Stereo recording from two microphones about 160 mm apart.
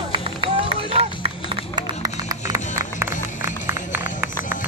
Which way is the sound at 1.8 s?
25° right (ahead or behind).